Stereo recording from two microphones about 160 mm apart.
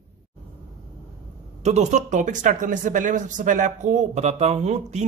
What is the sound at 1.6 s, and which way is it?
Speech, 45° right (ahead or behind).